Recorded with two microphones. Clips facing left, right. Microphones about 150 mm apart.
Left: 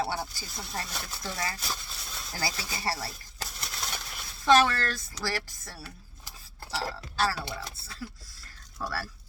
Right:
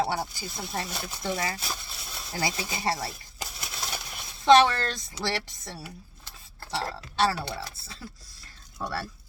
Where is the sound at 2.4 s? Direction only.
20° right (ahead or behind).